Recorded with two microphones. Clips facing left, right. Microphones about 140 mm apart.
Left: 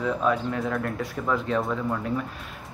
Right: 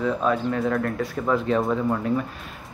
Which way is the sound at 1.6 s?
25° right (ahead or behind).